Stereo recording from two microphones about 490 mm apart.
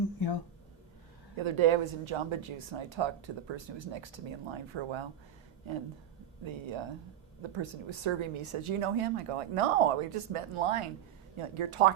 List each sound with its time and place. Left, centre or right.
1.4 s speech: right
6.4 s speech: right
11.3 s speech: right